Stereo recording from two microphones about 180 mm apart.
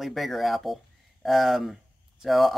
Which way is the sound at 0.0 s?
Centre (ahead or behind).